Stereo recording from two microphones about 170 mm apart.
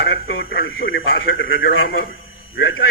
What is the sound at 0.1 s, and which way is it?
Speech, 65° left (ahead or behind).